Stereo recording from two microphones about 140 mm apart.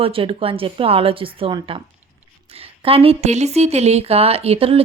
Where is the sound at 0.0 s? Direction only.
40° right (ahead or behind).